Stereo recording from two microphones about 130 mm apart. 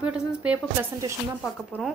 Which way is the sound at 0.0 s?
10° right (ahead or behind).